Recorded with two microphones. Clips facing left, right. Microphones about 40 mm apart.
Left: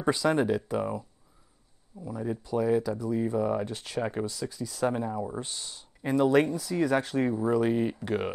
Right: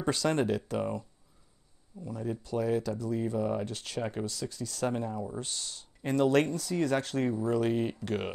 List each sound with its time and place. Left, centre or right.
0.0 s speech: centre
3.6 s speech: centre
5.2 s speech: centre